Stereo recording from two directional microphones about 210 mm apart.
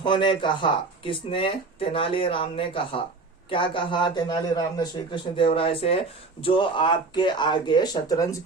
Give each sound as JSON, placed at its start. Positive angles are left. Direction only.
{"t": 0.0, "sound": "speech", "side_deg": 20}